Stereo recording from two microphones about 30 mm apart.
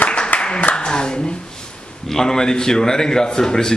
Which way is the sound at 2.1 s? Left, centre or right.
Centre.